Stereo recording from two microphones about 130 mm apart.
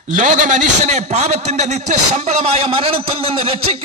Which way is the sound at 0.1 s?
70° right (ahead or behind).